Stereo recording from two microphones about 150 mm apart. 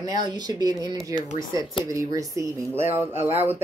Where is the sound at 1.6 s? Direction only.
35° left (ahead or behind).